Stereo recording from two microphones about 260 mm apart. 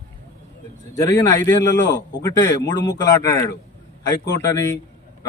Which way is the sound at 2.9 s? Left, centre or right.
Centre.